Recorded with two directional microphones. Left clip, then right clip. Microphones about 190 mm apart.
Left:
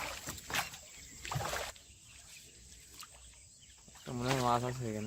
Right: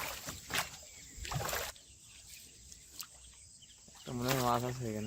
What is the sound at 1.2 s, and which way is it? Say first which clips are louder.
Rowboat: even; 55° right (ahead or behind).